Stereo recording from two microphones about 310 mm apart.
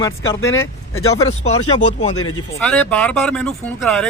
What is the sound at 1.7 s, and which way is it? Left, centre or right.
Speech, left.